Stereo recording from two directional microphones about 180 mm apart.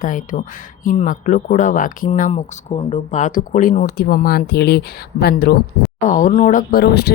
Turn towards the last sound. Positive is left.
turn(degrees=60)  # may be behind; listen again after turning